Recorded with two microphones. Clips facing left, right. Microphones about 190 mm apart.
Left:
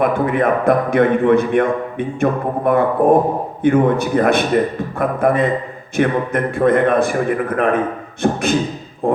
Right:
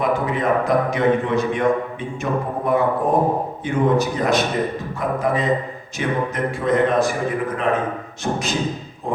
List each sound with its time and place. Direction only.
0.0 s a man's voice: 55° left (ahead or behind)
9.0 s music: 55° left (ahead or behind)